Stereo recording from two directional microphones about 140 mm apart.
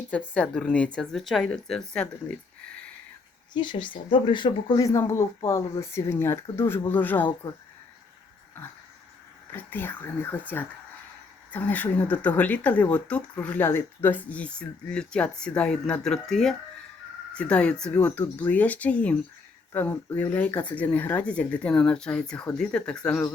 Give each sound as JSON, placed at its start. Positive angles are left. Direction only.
{"t": 0.1, "sound": "speech", "side_deg": 10}
{"t": 3.5, "sound": "speech", "side_deg": 35}
{"t": 9.5, "sound": "speech", "side_deg": 15}